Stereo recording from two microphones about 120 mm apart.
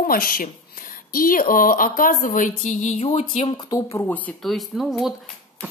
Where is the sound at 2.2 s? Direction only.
90° left; by 3.5 s 60° left (ahead or behind).